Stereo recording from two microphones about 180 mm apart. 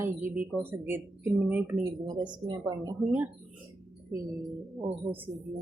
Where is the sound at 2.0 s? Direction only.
25° right (ahead or behind).